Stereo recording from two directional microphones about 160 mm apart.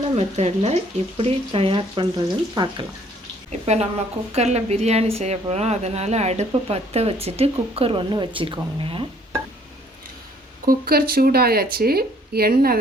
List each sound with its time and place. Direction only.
0.2 s a woman's voice: 40° right (ahead or behind)
3.7 s a woman's voice: 45° right (ahead or behind)
10.7 s speech: 70° right (ahead or behind)